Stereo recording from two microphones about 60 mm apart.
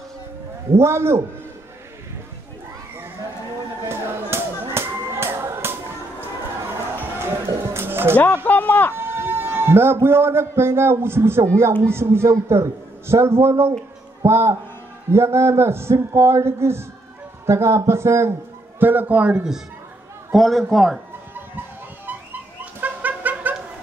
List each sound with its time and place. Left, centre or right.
0.7 s a man's voice: right
3.8 s a sound: right
4.9 s music: right
7.2 s a sound: right
8.5 s a sound: left
8.9 s a man's voice: right
18.8 s a man's voice: right
20.3 s a man's voice: centre
22.0 s music: right